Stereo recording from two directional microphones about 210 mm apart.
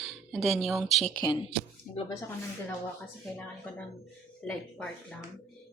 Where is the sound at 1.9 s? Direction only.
40° left (ahead or behind).